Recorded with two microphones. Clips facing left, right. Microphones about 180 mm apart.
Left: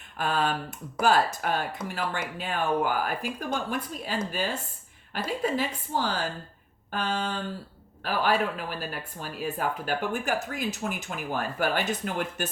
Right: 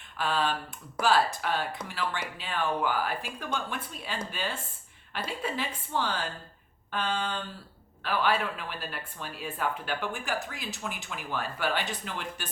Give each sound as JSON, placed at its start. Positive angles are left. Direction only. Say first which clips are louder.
{"t": 0.2, "sound": "a woman's voice", "louder": "left 2 dB", "side_deg": 45}